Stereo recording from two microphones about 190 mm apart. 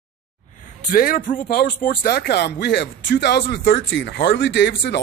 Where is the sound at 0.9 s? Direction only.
50° left (ahead or behind).